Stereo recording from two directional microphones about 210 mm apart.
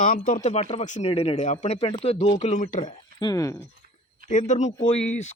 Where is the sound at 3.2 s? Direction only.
15° left (ahead or behind).